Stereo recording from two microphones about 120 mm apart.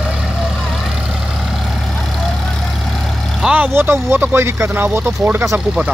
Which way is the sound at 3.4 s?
10° right (ahead or behind).